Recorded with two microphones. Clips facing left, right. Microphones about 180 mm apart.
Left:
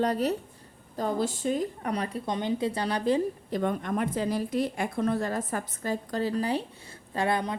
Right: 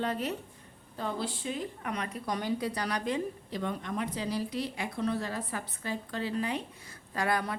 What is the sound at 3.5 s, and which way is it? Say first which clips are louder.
A woman's voice: left 6 dB; 50° left (ahead or behind).